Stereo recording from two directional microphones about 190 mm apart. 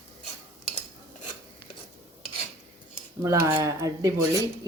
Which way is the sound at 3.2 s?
15° right (ahead or behind).